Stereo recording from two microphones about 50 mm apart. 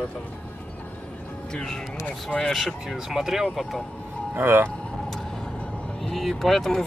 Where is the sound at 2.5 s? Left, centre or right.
Centre.